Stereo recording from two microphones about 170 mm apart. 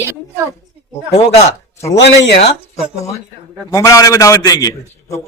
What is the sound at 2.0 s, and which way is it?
Speech, 90° left.